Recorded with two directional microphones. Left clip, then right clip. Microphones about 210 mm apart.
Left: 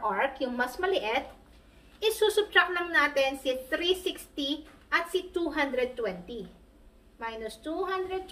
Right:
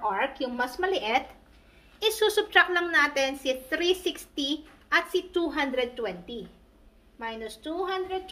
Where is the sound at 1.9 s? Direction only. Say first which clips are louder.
Right 1 dB; 45° right (ahead or behind).